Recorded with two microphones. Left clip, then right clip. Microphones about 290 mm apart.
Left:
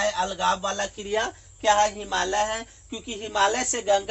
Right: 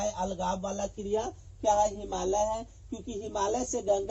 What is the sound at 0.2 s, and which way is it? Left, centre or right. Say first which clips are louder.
Speech: left 8 dB; left.